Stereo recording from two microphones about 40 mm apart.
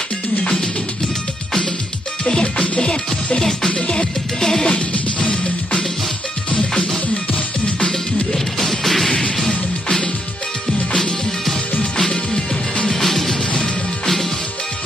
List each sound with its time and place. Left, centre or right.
2.2 s music: left
4.6 s music: left
7.9 s music: centre
11.8 s music: centre